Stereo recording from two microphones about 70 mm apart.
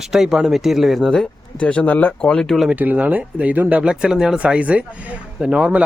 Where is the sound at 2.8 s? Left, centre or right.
Right.